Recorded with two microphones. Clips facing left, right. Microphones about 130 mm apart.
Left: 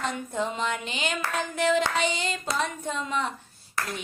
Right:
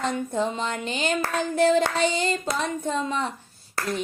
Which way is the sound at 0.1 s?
35° right (ahead or behind).